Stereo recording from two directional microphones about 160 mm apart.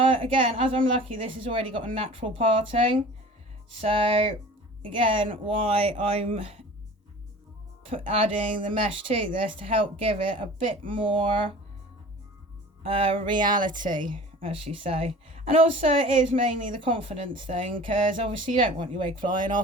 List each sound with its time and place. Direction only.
0.1 s speech: 35° right (ahead or behind)
7.9 s speech: 35° right (ahead or behind)
12.8 s speech: 35° right (ahead or behind)
13.7 s speech: 55° right (ahead or behind)
14.1 s speech: 35° right (ahead or behind)
19.4 s speech: 55° right (ahead or behind)